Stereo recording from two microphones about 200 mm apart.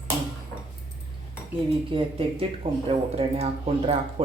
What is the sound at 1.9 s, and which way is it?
Speech, 30° right (ahead or behind).